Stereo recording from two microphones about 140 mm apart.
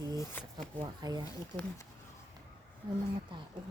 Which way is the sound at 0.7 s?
30° right (ahead or behind).